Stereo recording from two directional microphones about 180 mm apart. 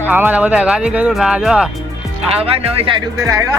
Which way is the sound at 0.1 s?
10° right (ahead or behind).